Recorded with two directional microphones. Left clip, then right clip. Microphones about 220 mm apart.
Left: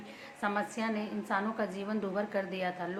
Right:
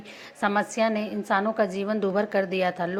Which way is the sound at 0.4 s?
35° right (ahead or behind).